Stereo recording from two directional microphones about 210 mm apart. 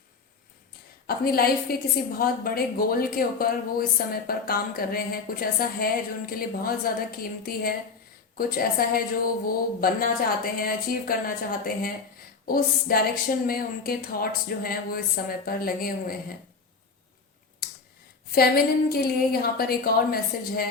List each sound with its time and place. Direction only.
1.0 s speech: 45° left (ahead or behind)
18.3 s speech: 45° left (ahead or behind)